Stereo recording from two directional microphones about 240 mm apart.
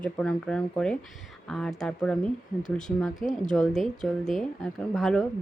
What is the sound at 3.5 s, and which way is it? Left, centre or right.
Speech, centre.